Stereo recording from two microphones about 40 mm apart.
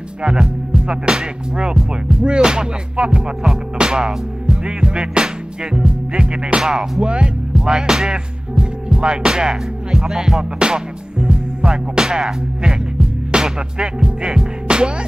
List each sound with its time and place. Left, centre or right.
0.2 s speech: right
3.7 s music: centre
6.6 s speech: centre
10.6 s music: right